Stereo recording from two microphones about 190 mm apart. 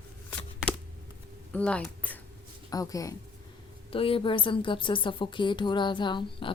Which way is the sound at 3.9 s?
30° left (ahead or behind).